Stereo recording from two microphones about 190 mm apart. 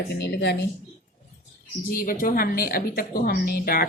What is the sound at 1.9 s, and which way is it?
A woman's voice, 45° left (ahead or behind).